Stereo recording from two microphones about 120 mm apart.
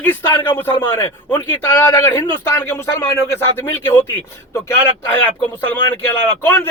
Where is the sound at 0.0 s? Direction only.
15° left (ahead or behind).